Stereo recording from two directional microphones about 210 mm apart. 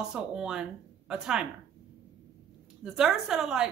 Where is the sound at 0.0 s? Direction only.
5° right (ahead or behind).